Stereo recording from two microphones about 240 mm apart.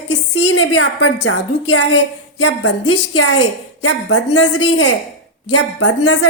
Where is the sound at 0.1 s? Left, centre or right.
Left.